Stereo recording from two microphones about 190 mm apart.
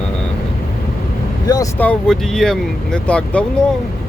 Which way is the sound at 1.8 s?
5° left (ahead or behind).